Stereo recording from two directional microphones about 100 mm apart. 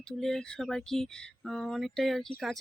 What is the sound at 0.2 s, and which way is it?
A woman's voice, 5° left (ahead or behind).